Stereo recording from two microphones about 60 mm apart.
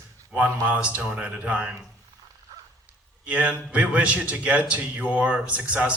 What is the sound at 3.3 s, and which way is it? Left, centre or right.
Speech, right.